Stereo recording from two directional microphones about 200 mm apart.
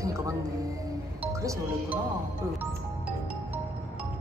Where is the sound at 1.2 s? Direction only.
15° right (ahead or behind).